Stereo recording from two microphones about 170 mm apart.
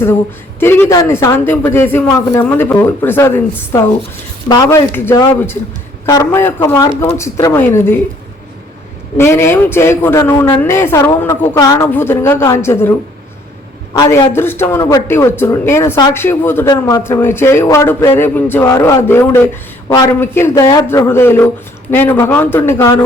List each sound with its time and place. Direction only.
0.6 s a man's voice: 15° left (ahead or behind)
9.1 s a man's voice: 15° left (ahead or behind)
13.9 s a man's voice: 25° left (ahead or behind)